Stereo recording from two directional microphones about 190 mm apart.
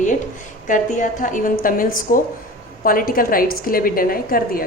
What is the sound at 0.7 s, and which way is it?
A woman's voice, 45° left (ahead or behind).